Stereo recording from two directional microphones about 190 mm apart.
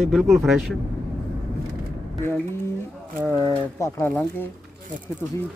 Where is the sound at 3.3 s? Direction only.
15° left (ahead or behind).